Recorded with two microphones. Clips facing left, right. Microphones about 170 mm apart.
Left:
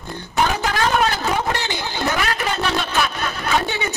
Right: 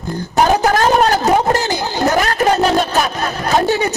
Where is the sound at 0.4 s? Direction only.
40° right (ahead or behind).